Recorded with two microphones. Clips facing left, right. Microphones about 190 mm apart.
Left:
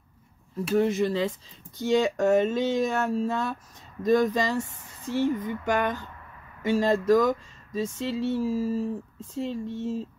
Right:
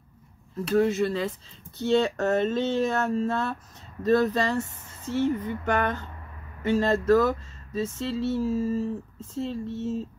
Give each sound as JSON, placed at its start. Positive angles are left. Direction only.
{"t": 0.7, "sound": "speech", "side_deg": 15}